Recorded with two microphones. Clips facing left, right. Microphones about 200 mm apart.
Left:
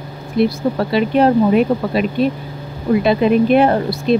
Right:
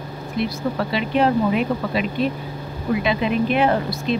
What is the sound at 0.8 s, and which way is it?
Speech, 40° left (ahead or behind).